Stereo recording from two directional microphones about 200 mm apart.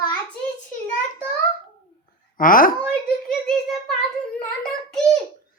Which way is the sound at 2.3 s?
45° left (ahead or behind).